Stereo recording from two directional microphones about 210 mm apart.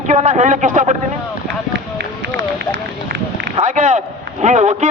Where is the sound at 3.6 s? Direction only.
35° right (ahead or behind).